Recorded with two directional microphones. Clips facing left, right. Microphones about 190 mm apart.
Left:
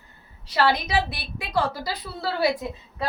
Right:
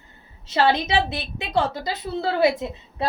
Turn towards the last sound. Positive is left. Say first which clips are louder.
# right 2 dB
turn(degrees=-25)  # may be behind; listen again after turning